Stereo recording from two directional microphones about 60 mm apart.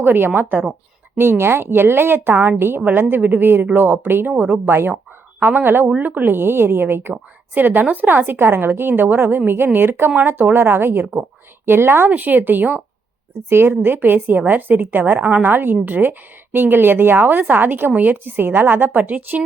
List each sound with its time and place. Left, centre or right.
0.0 s a woman's voice: right
13.5 s a woman's voice: right